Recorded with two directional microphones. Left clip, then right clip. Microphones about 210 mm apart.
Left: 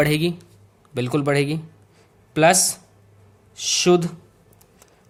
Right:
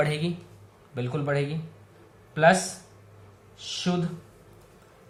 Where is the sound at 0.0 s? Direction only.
50° left (ahead or behind).